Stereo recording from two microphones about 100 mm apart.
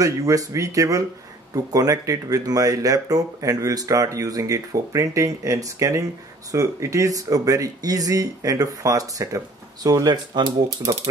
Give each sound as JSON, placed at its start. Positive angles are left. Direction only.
{"t": 0.0, "sound": "speech", "side_deg": -35}